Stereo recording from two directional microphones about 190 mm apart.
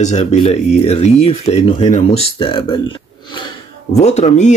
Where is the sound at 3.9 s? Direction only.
35° left (ahead or behind).